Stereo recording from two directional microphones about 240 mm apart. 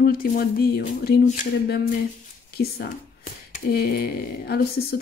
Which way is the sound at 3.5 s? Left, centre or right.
Left.